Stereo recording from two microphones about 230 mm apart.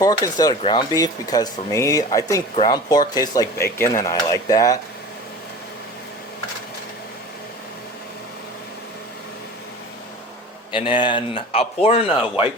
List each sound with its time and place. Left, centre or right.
0.0 s speech: centre
10.7 s a man's voice: left